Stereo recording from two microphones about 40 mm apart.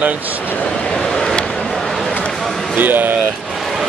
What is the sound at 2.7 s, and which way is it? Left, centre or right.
Speech, right.